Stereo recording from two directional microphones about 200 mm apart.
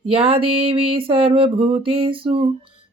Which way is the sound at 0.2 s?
30° right (ahead or behind).